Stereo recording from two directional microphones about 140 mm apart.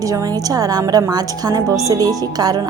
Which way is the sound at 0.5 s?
25° right (ahead or behind).